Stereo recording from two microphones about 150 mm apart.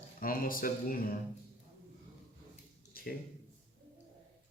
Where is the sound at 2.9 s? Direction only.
80° left.